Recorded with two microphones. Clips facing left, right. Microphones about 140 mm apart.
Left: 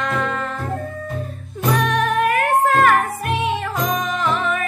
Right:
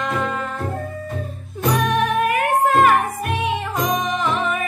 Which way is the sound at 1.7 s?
10° right (ahead or behind).